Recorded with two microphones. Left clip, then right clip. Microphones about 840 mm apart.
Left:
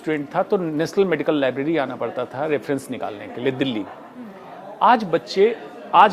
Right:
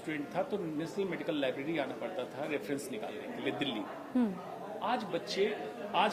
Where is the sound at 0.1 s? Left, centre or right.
Left.